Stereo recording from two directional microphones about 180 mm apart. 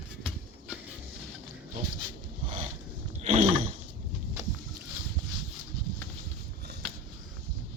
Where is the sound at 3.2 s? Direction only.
30° right (ahead or behind).